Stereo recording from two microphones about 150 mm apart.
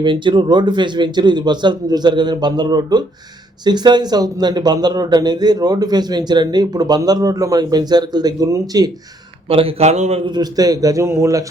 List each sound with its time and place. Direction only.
0.0 s speech: 30° right (ahead or behind)
9.5 s speech: 40° right (ahead or behind)
10.2 s speech: 25° right (ahead or behind)